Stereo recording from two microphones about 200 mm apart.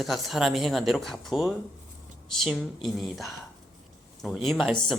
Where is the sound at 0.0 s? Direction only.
Centre (ahead or behind).